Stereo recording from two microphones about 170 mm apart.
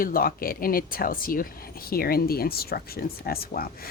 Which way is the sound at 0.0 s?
60° left (ahead or behind).